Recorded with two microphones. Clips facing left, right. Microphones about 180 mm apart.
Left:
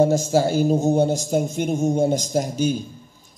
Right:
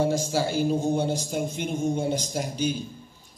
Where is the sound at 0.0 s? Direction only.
45° left (ahead or behind).